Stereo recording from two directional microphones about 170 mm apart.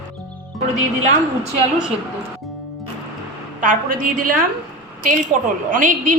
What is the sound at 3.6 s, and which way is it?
Speech, 55° right (ahead or behind).